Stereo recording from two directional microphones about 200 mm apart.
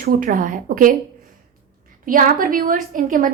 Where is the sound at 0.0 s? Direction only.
50° right (ahead or behind).